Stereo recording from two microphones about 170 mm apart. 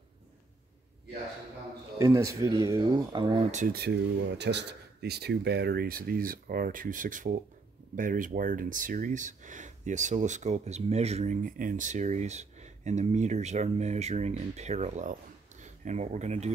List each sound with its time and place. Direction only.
2.0 s speech: 20° right (ahead or behind)
3.5 s speech: 60° right (ahead or behind); by 16.5 s 40° right (ahead or behind)